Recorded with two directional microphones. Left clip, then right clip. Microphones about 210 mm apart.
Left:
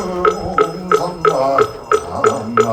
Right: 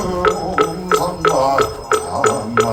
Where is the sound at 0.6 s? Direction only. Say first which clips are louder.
Left 2 dB; 15° right (ahead or behind).